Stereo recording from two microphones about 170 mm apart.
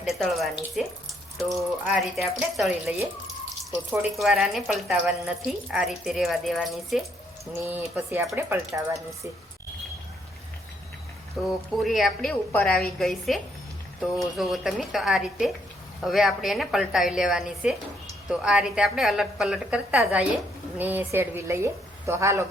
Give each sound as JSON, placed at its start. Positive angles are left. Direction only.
{"t": 0.0, "sound": "speech", "side_deg": 0}
{"t": 1.5, "sound": "a woman's voice", "side_deg": -15}
{"t": 2.0, "sound": "speech", "side_deg": 0}
{"t": 4.2, "sound": "speech", "side_deg": -5}
{"t": 7.9, "sound": "a woman's voice", "side_deg": -10}
{"t": 11.4, "sound": "a woman's voice", "side_deg": 0}